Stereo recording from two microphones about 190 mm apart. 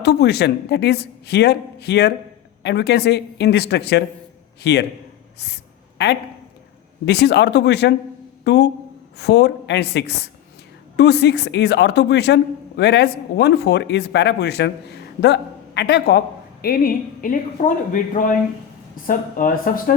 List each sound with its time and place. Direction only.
0.0 s a woman's voice: 60° left (ahead or behind)
6.0 s a woman's voice: 60° left (ahead or behind)